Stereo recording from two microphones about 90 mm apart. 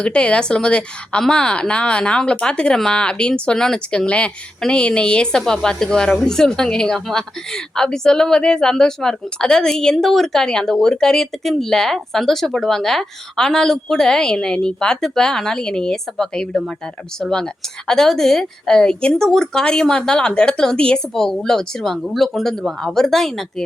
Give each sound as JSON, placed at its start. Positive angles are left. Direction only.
{"t": 0.0, "sound": "speech", "side_deg": 10}